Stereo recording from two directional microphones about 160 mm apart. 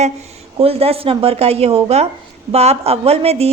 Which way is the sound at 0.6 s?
40° right (ahead or behind).